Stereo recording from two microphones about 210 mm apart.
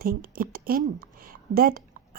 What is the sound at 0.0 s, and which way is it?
A woman's voice, 45° right (ahead or behind).